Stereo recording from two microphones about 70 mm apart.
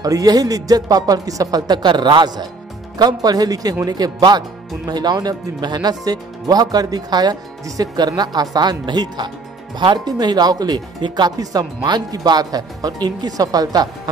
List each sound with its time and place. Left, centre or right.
0.0 s speech: right
7.6 s speech: right